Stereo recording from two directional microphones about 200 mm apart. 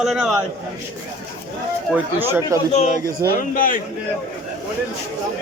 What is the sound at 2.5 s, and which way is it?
Speech, 15° right (ahead or behind).